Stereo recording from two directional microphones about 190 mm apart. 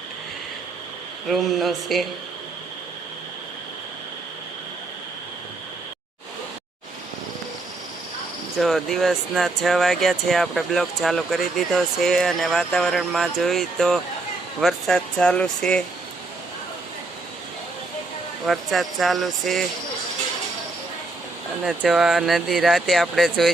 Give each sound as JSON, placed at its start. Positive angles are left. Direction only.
{"t": 1.3, "sound": "speech", "side_deg": 0}
{"t": 8.5, "sound": "speech", "side_deg": 0}
{"t": 18.4, "sound": "speech", "side_deg": 0}
{"t": 21.6, "sound": "speech", "side_deg": -5}